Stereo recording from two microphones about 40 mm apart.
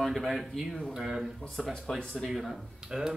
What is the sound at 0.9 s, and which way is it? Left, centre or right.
Speech, centre.